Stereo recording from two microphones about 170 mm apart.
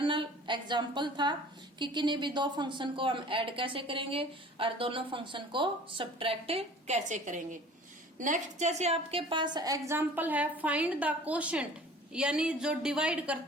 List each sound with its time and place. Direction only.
0.0 s a woman's voice: 30° right (ahead or behind); by 13.4 s 5° right (ahead or behind)